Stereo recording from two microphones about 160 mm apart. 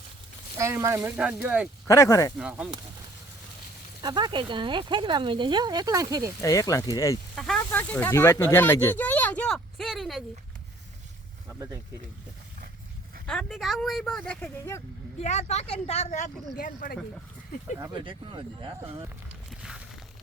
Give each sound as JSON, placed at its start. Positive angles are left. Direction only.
{"t": 0.6, "sound": "speech", "side_deg": -20}
{"t": 1.9, "sound": "speech", "side_deg": 20}
{"t": 2.4, "sound": "speech", "side_deg": -5}
{"t": 4.0, "sound": "speech", "side_deg": -30}
{"t": 6.4, "sound": "speech", "side_deg": 20}
{"t": 7.3, "sound": "speech", "side_deg": 5}
{"t": 11.4, "sound": "speech", "side_deg": -20}
{"t": 13.2, "sound": "speech", "side_deg": 5}
{"t": 15.2, "sound": "speech", "side_deg": 45}
{"t": 16.6, "sound": "speech", "side_deg": 65}
{"t": 17.7, "sound": "speech", "side_deg": -25}
{"t": 19.5, "sound": "a sound", "side_deg": -5}